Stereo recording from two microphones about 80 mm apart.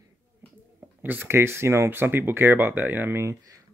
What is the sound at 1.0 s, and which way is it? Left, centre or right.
Speech, right.